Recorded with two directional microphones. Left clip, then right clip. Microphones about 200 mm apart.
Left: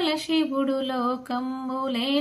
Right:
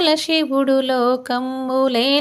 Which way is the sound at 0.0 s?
50° right (ahead or behind).